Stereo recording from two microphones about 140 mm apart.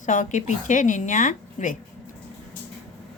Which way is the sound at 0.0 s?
65° left (ahead or behind).